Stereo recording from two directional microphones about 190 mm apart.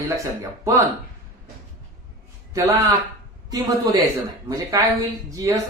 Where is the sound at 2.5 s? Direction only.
15° right (ahead or behind).